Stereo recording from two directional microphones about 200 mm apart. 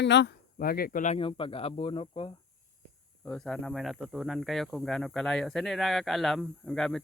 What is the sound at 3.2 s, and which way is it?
Speech, centre (ahead or behind).